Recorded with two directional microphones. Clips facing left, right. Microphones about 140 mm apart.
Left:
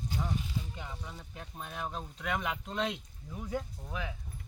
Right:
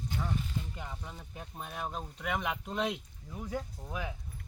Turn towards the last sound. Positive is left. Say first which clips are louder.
# right 1 dB
turn(degrees=-15)  # may be behind; listen again after turning